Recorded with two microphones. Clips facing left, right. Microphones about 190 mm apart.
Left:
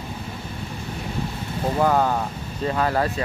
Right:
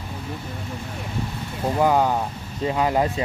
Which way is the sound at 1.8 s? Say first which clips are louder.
Right 1 dB; 10° right (ahead or behind).